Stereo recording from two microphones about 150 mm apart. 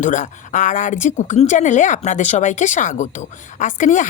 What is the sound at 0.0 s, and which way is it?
A woman's voice, 60° left (ahead or behind).